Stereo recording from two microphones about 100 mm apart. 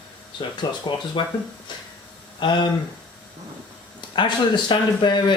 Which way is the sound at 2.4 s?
50° left (ahead or behind).